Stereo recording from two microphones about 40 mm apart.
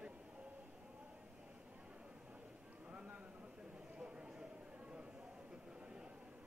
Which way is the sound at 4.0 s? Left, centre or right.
Right.